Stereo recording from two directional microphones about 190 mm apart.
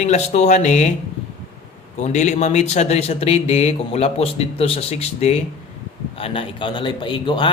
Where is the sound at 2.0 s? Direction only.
35° left (ahead or behind).